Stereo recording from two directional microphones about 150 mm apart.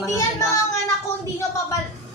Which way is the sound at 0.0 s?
20° left (ahead or behind).